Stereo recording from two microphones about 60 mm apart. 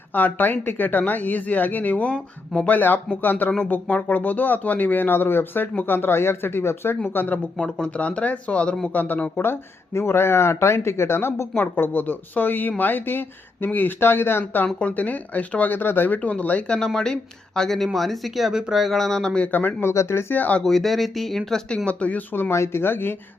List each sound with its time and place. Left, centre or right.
0.1 s speech: left
7.8 s speech: left
9.4 s speech: left
14.0 s speech: left
14.8 s speech: left
16.6 s speech: centre
19.5 s speech: left
19.9 s speech: left
20.3 s speech: left
20.6 s speech: centre
21.8 s speech: left
22.5 s speech: left
22.8 s speech: left